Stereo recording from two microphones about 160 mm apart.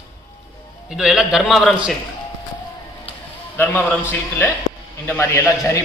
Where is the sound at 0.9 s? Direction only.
5° right (ahead or behind).